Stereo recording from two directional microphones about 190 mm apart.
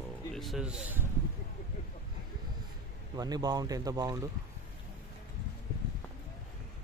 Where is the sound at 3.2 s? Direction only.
20° right (ahead or behind).